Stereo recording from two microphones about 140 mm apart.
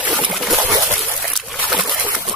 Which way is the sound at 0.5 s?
25° right (ahead or behind).